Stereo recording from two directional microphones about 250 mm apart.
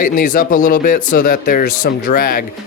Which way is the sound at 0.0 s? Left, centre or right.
Left.